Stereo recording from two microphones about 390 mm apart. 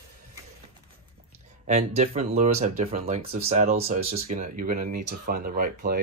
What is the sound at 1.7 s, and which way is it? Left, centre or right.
Speech, centre.